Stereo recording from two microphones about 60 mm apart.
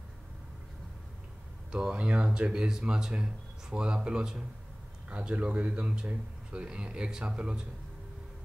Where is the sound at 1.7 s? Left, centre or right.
Centre.